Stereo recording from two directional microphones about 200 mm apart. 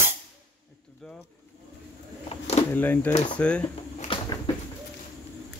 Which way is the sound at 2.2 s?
35° left (ahead or behind).